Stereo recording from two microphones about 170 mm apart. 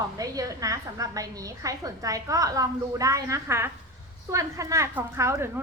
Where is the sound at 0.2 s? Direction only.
20° right (ahead or behind).